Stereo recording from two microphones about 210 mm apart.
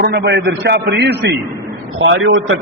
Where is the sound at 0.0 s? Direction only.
55° right (ahead or behind).